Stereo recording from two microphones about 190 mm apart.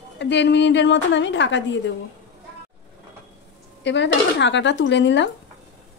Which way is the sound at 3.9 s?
65° left (ahead or behind).